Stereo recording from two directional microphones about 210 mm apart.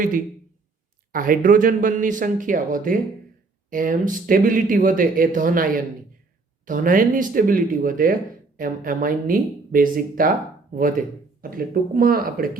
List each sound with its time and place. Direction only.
1.1 s speech: 40° right (ahead or behind)